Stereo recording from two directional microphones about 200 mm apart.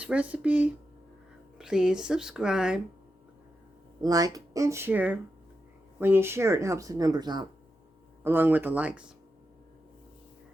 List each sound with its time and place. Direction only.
0.0 s speech: 5° right (ahead or behind)
4.0 s speech: 20° right (ahead or behind)